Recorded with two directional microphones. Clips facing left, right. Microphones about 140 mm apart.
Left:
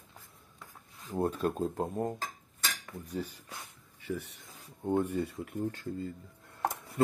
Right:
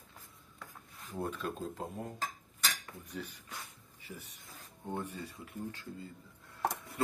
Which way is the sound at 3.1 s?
35° left (ahead or behind).